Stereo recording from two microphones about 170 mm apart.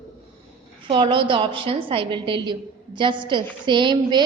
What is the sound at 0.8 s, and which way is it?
A woman's voice, 30° right (ahead or behind).